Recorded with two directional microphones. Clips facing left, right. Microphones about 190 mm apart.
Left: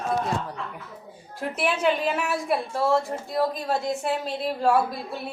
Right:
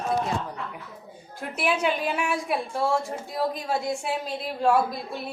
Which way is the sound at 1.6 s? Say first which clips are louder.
Left 1 dB; centre (ahead or behind).